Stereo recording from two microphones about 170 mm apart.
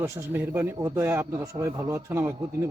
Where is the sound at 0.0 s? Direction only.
15° right (ahead or behind).